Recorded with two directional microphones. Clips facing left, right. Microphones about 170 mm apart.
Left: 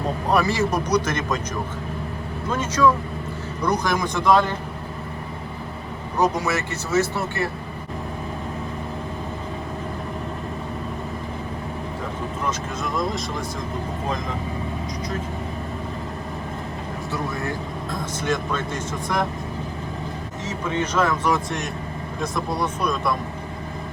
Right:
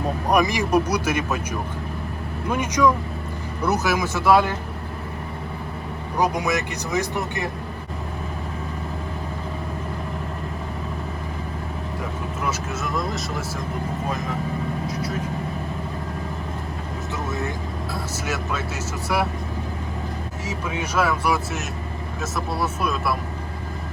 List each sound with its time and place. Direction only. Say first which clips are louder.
0.3 s speech: right 1 dB; 15° right (ahead or behind)
2.5 s speech: even; 15° right (ahead or behind)
6.1 s speech: left 1 dB; 10° right (ahead or behind)
12.5 s speech: right 1 dB; centre (ahead or behind)
17.9 s speech: left 5 dB; 5° right (ahead or behind)
20.5 s speech: left 3 dB; 10° right (ahead or behind)